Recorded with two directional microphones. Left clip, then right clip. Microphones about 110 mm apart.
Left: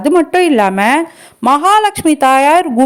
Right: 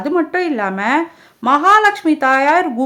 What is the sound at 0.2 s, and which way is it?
A woman's voice, 65° left (ahead or behind).